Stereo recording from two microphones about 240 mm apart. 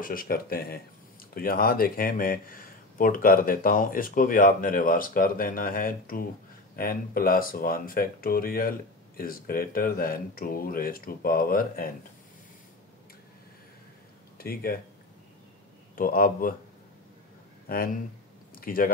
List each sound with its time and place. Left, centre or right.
0.0 s speech: left
14.4 s speech: left
16.0 s speech: left
17.6 s speech: left